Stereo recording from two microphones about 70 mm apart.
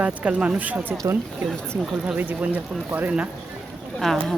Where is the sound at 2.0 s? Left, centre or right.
Right.